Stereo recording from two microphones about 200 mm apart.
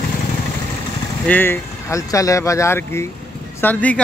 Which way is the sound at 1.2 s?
10° left (ahead or behind).